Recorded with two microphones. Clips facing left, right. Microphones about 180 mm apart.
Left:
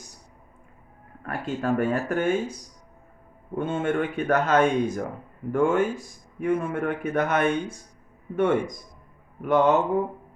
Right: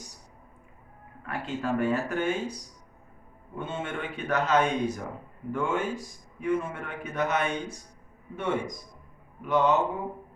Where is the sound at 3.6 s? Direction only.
50° left (ahead or behind).